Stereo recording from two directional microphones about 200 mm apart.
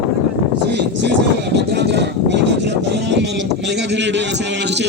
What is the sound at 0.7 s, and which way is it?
Speech, 60° right (ahead or behind).